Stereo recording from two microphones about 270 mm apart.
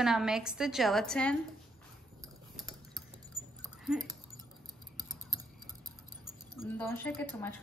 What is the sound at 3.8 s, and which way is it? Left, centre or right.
Speech, centre.